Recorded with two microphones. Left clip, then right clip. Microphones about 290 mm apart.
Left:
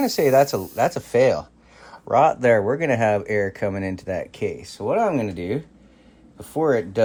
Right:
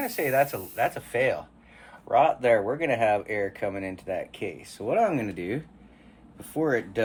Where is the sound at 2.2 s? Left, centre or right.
Left.